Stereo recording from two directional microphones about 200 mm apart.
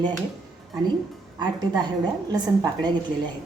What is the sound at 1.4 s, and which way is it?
A woman's voice, 20° right (ahead or behind).